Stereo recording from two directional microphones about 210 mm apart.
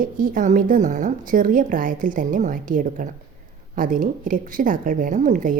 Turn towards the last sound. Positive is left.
turn(degrees=-40)  # may be behind; listen again after turning